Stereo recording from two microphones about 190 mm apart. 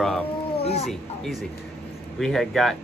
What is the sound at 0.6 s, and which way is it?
Cat, 35° left (ahead or behind).